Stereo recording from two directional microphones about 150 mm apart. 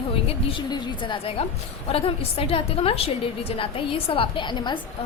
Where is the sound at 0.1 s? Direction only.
35° left (ahead or behind).